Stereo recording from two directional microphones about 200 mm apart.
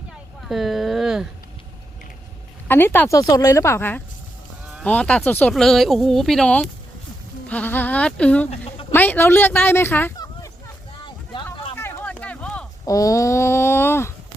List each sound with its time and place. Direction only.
0.4 s a sound: centre (ahead or behind)
2.6 s a woman's voice: 10° left (ahead or behind)
8.4 s a woman's voice: 30° left (ahead or behind)
8.9 s speech: 10° left (ahead or behind)
11.8 s a sound: 10° left (ahead or behind)
12.8 s speech: 15° left (ahead or behind)